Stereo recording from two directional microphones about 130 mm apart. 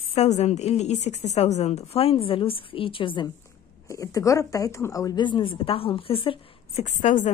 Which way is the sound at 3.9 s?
25° left (ahead or behind).